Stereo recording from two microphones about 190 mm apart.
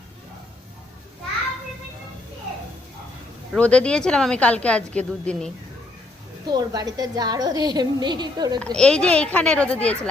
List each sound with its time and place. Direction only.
3.5 s a woman's voice: 5° left (ahead or behind)
6.4 s a woman's voice: 20° right (ahead or behind)
8.5 s speech: 5° left (ahead or behind)